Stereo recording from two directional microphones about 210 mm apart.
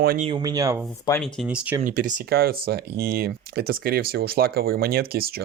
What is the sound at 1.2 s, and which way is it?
Speech, centre (ahead or behind).